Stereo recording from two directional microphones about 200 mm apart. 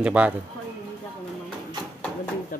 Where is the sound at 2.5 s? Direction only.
45° left (ahead or behind).